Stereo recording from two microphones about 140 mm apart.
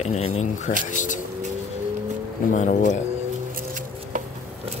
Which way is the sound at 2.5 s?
60° left (ahead or behind).